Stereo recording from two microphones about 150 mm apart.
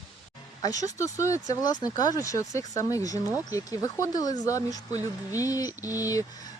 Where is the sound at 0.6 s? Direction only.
25° left (ahead or behind).